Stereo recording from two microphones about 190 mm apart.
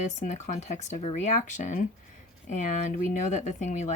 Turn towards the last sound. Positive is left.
turn(degrees=40)  # may be behind; listen again after turning